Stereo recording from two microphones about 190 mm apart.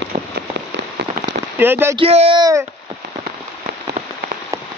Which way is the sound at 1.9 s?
30° right (ahead or behind).